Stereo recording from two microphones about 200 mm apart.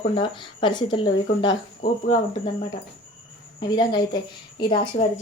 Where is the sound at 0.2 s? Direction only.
25° left (ahead or behind).